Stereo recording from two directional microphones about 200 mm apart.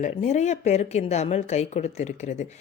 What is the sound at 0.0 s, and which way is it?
Speech, 35° left (ahead or behind).